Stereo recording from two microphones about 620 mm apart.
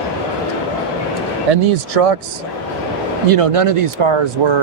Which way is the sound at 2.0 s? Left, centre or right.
Right.